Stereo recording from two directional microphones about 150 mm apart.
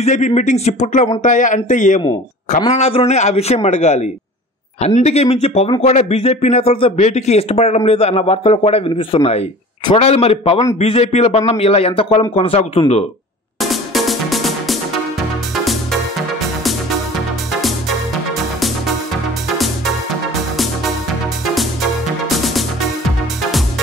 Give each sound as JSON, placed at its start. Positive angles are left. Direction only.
{"t": 0.0, "sound": "speech", "side_deg": 50}
{"t": 2.7, "sound": "a man's voice", "side_deg": 40}
{"t": 13.6, "sound": "music", "side_deg": 0}
{"t": 17.6, "sound": "music", "side_deg": 0}
{"t": 22.4, "sound": "music", "side_deg": 0}